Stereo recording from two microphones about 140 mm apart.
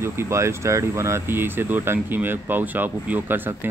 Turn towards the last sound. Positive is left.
turn(degrees=-15)  # may be behind; listen again after turning